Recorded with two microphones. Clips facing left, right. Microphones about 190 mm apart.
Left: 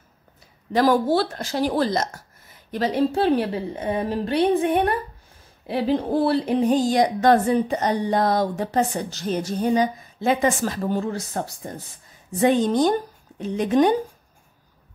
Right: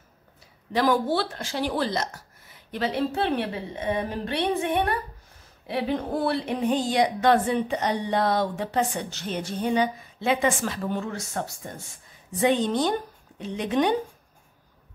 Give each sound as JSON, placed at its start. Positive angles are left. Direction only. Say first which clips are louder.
{"t": 0.7, "sound": "a woman's voice", "louder": "left 4 dB", "side_deg": 40}